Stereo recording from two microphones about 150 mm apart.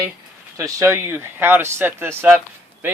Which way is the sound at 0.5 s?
20° right (ahead or behind).